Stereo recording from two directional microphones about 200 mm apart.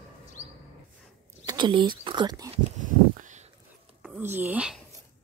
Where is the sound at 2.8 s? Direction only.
40° right (ahead or behind).